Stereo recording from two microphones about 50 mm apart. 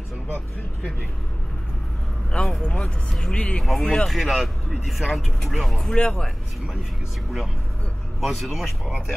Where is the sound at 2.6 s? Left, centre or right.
Left.